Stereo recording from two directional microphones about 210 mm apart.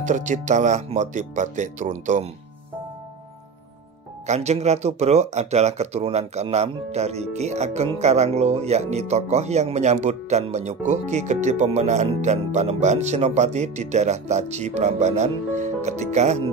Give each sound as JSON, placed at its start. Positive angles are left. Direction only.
{"t": 0.0, "sound": "speech", "side_deg": -35}
{"t": 4.3, "sound": "speech", "side_deg": -30}